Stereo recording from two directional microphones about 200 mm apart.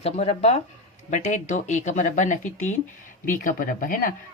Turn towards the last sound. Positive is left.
turn(degrees=45)  # may be behind; listen again after turning